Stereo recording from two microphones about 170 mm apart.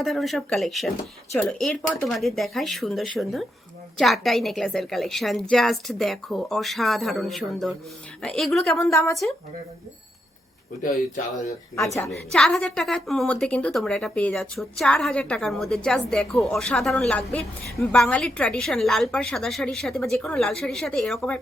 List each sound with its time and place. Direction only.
0.0 s a woman's voice: centre (ahead or behind)
8.9 s a woman's voice: 15° left (ahead or behind)
12.3 s a woman's voice: 5° left (ahead or behind)